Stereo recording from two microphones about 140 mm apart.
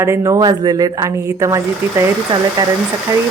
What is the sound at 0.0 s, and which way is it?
A woman's voice, 20° right (ahead or behind).